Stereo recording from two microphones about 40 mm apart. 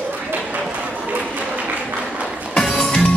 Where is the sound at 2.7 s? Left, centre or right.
Left.